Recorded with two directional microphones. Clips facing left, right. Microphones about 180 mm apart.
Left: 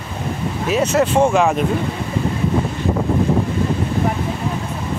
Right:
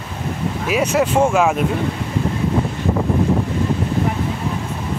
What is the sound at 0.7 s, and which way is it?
Speech, 10° right (ahead or behind).